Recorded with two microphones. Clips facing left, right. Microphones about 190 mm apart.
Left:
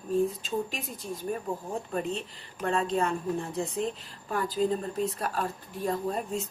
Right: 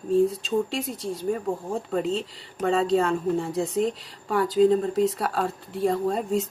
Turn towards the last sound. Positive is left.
turn(degrees=-85)